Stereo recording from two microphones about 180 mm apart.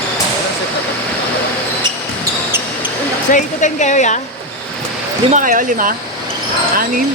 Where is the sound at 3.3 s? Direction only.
45° left (ahead or behind).